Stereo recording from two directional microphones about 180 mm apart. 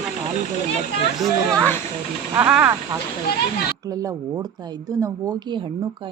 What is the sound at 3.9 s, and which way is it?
Speech, 20° right (ahead or behind).